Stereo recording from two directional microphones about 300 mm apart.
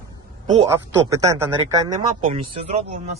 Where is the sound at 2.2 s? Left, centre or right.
Right.